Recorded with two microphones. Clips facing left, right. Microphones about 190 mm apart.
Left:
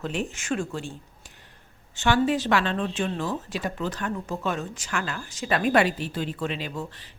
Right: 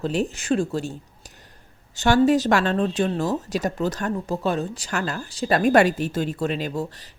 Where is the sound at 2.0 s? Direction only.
40° right (ahead or behind).